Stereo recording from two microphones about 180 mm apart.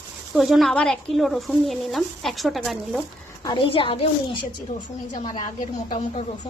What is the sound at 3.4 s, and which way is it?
Speech, 25° left (ahead or behind).